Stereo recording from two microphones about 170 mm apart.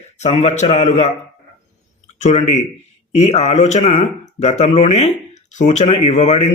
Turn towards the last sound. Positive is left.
turn(degrees=40)  # may be behind; listen again after turning